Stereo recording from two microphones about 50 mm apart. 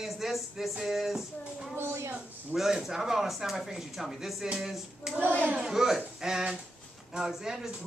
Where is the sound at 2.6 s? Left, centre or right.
Centre.